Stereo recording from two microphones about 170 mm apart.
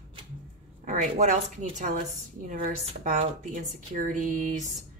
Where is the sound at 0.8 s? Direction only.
45° right (ahead or behind).